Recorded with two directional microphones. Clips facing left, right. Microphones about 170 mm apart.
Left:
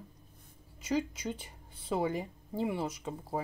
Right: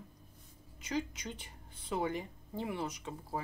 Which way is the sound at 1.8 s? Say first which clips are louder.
Left 3 dB; 30° left (ahead or behind).